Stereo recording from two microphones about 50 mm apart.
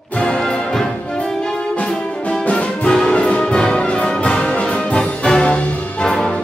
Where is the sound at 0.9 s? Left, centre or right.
Left.